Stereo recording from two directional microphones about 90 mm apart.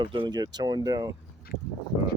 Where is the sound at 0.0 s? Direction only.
60° right (ahead or behind); by 1.1 s 45° right (ahead or behind).